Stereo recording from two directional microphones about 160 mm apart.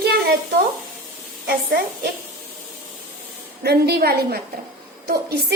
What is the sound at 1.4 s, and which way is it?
Speech, 75° right (ahead or behind).